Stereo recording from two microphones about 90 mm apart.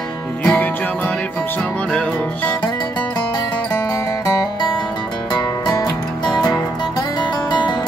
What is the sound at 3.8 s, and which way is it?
Music, 40° left (ahead or behind).